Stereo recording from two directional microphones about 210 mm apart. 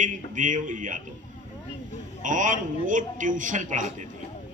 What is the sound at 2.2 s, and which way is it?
A man's voice, 40° right (ahead or behind).